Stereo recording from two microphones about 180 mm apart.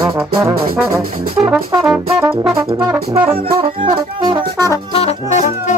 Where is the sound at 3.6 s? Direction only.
25° right (ahead or behind).